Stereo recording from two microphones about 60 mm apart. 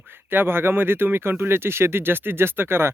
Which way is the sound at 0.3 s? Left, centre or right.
Right.